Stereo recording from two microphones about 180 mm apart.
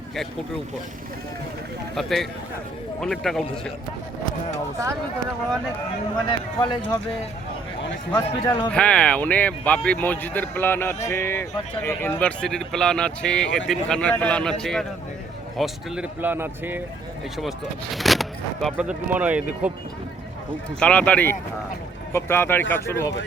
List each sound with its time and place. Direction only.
2.0 s speech: centre (ahead or behind)
6.6 s a man's voice: 25° left (ahead or behind)
8.1 s a man's voice: 25° left (ahead or behind)
8.7 s speech: 5° left (ahead or behind); by 16.8 s 10° right (ahead or behind)
17.9 s speech: centre (ahead or behind)
20.7 s speech: 5° left (ahead or behind)